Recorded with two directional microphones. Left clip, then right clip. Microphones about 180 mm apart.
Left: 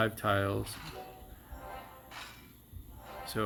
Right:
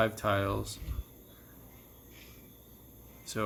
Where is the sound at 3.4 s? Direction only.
20° left (ahead or behind).